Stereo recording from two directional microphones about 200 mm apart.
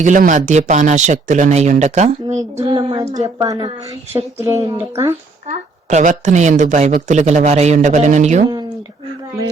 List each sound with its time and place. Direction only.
0.0 s a woman's voice: 40° right (ahead or behind)
2.2 s speech: 15° right (ahead or behind)
5.5 s a woman's voice: 35° right (ahead or behind)